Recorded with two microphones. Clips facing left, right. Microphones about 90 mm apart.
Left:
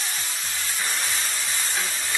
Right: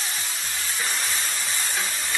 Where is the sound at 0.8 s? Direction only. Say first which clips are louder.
Even; centre (ahead or behind).